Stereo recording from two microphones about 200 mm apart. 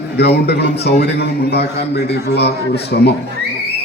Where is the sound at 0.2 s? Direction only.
55° left (ahead or behind).